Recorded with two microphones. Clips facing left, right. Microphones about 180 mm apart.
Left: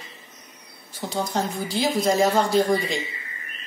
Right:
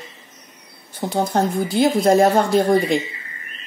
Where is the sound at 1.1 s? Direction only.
55° right (ahead or behind).